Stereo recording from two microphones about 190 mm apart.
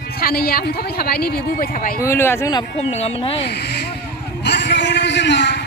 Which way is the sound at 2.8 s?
35° left (ahead or behind).